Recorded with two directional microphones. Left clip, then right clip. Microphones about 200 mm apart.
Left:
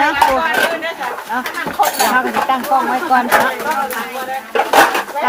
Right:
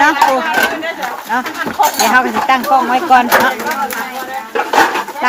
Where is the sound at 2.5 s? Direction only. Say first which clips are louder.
Right 7 dB; 35° right (ahead or behind).